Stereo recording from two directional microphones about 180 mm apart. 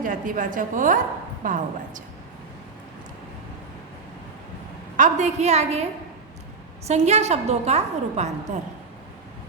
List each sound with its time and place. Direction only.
0.0 s a woman's voice: 50° right (ahead or behind)
4.9 s a woman's voice: 40° right (ahead or behind)